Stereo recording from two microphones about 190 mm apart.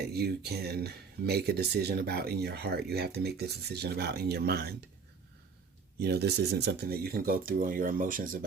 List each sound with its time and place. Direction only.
0.0 s speech: 55° right (ahead or behind)
6.0 s speech: 60° right (ahead or behind)